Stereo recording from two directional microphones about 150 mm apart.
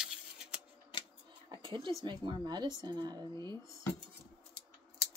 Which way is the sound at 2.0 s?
30° right (ahead or behind).